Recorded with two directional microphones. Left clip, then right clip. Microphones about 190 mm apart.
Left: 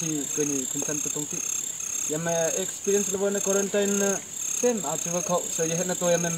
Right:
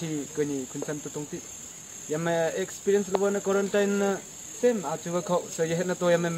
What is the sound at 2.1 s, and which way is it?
Speech, 15° right (ahead or behind).